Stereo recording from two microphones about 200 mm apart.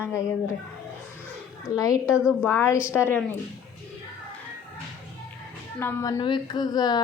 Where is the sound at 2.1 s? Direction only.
5° right (ahead or behind).